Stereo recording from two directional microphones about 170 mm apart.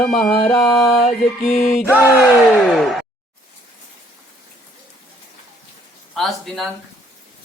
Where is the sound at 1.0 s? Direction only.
45° left (ahead or behind).